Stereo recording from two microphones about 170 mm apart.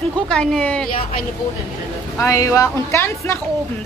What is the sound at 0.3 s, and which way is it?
Speech, 5° left (ahead or behind).